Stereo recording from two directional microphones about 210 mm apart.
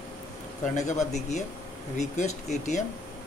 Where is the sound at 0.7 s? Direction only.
35° left (ahead or behind).